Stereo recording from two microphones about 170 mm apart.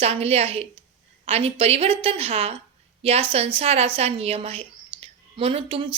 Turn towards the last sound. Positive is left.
turn(degrees=-35)  # may be behind; listen again after turning